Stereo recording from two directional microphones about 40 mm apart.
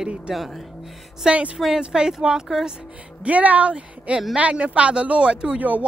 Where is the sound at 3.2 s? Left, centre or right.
Right.